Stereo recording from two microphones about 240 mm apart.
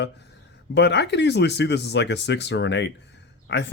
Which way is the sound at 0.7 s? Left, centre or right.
Left.